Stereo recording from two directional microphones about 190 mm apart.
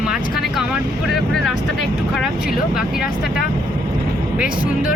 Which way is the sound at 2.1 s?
Centre (ahead or behind).